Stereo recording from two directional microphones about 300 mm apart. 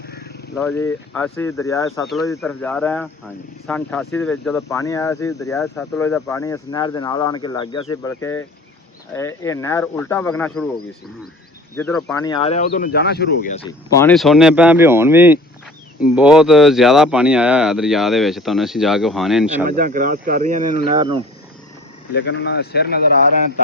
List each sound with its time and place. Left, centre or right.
0.0 s wild animals: left
0.5 s speech: centre
11.8 s speech: centre
19.6 s speech: right
22.1 s speech: left